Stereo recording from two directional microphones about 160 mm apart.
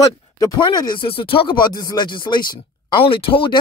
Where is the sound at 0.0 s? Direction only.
25° left (ahead or behind).